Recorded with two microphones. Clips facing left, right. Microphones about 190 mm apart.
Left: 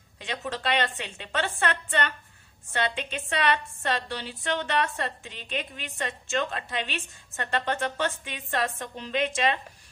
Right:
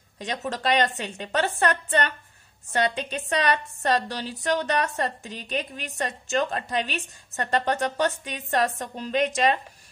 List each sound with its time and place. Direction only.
0.2 s a woman's voice: 40° right (ahead or behind)